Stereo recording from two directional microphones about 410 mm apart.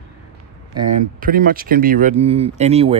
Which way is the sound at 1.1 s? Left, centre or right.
Centre.